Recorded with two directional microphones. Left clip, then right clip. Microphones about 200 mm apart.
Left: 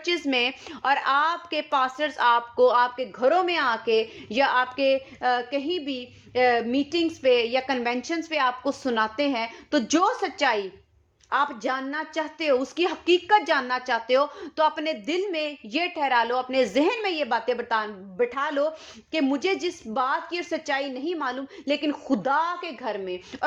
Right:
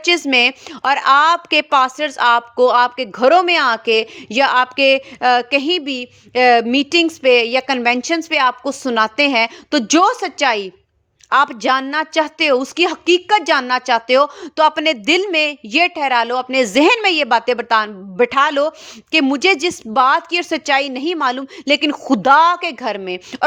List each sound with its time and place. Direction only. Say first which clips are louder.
0.0 s a woman's voice: right 11 dB; 40° right (ahead or behind)